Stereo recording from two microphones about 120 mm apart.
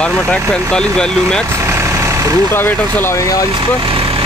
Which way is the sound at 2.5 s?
15° left (ahead or behind).